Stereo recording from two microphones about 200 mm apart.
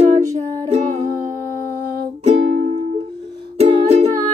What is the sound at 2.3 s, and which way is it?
Music, 75° right (ahead or behind).